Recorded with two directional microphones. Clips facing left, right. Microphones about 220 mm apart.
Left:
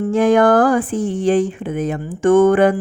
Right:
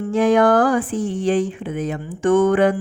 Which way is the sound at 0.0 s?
50° left (ahead or behind).